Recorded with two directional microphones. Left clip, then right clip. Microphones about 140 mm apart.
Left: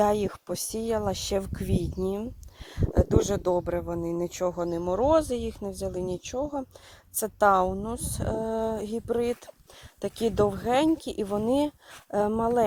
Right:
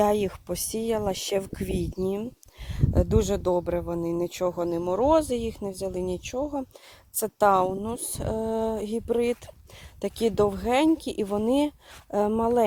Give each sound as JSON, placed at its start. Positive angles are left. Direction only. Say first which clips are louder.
{"t": 0.0, "sound": "speech", "louder": "right 1 dB", "side_deg": -25}